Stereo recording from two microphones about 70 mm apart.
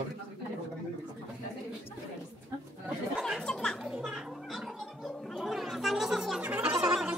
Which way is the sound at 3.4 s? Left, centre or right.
Centre.